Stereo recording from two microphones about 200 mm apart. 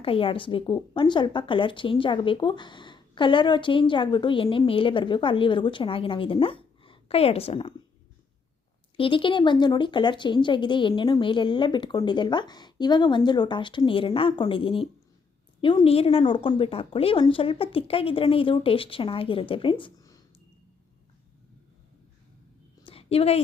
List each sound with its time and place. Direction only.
0.0 s a woman's voice: 25° left (ahead or behind)
9.0 s a woman's voice: 25° left (ahead or behind)
22.8 s a sound: 30° left (ahead or behind)